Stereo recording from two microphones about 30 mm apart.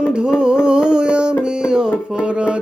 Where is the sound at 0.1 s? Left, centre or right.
Right.